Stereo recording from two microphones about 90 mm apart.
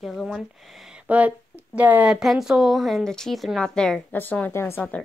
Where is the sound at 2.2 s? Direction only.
5° right (ahead or behind).